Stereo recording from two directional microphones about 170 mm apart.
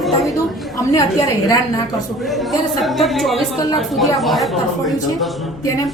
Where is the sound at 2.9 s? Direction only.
Centre (ahead or behind).